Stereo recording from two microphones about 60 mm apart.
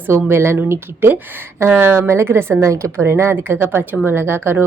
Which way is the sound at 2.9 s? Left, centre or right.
Right.